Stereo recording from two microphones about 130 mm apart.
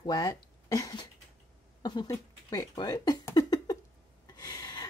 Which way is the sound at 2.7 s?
30° left (ahead or behind).